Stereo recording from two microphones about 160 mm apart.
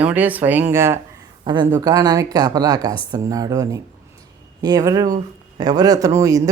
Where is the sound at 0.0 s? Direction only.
10° right (ahead or behind).